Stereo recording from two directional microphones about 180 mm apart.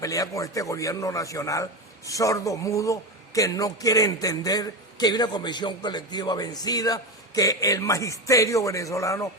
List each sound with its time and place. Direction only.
0.0 s a man's voice: 20° left (ahead or behind)